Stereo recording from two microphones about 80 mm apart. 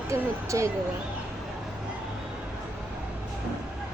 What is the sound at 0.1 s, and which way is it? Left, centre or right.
Speech, right.